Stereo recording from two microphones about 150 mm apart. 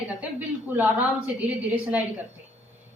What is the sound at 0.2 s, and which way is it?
Speech, 10° right (ahead or behind).